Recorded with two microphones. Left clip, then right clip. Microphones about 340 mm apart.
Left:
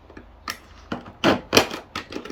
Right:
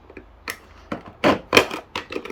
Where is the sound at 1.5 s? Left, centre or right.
Centre.